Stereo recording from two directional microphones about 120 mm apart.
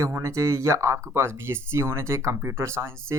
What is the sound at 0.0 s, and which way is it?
Speech, 25° right (ahead or behind).